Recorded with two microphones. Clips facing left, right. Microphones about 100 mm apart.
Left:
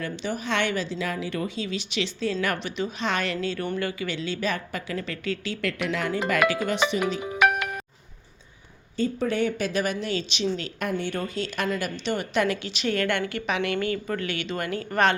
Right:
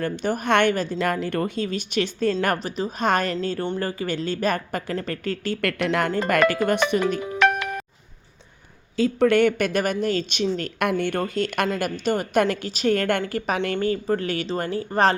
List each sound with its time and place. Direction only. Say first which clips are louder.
0.0 s speech: right 5 dB; 50° right (ahead or behind)
7.3 s music: right 1 dB; 10° left (ahead or behind)
9.0 s speech: right 7 dB; 80° right; by 10.7 s 50° right (ahead or behind)
10.8 s speech: right 5 dB; 65° right (ahead or behind)
11.7 s speech: right 4 dB; 45° right (ahead or behind)